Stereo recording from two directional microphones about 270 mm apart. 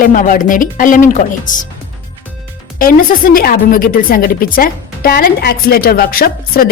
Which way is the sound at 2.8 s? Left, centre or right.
Left.